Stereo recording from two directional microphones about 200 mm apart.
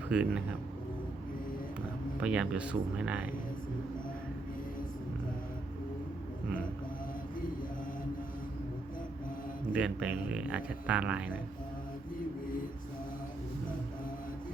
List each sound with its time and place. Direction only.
0.1 s speech: 5° right (ahead or behind)
2.2 s speech: 5° right (ahead or behind)
9.7 s speech: 5° right (ahead or behind)